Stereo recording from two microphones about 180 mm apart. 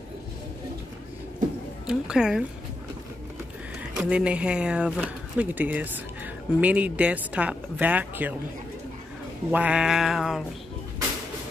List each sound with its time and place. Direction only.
1.9 s a woman's voice: 5° right (ahead or behind)
3.9 s speech: 5° right (ahead or behind)
9.5 s a sound: 5° right (ahead or behind)